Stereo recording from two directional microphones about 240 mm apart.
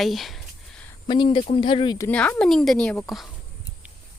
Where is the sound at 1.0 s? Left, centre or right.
Centre.